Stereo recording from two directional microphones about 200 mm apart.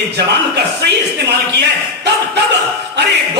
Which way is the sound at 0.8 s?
55° right (ahead or behind).